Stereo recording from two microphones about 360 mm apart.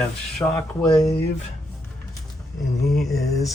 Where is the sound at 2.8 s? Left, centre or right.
Centre.